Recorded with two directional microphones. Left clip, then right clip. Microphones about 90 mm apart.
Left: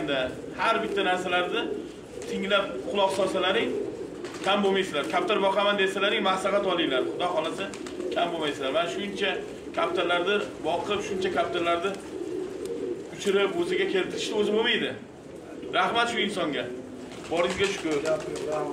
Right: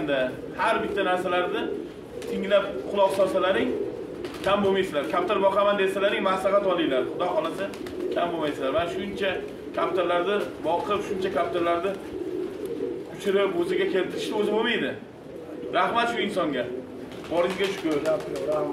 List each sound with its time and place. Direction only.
0.1 s a man's voice: 30° right (ahead or behind)
13.2 s a man's voice: 30° right (ahead or behind)